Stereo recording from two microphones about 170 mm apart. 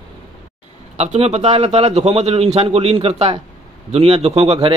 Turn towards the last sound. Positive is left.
turn(degrees=-40)  # may be behind; listen again after turning